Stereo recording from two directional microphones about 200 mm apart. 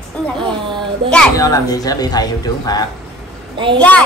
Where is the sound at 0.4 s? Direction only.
25° right (ahead or behind).